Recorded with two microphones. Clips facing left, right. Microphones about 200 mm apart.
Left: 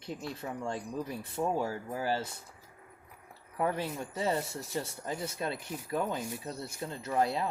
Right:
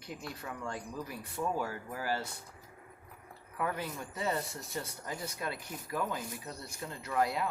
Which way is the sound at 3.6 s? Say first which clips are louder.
Left 4 dB; 30° left (ahead or behind).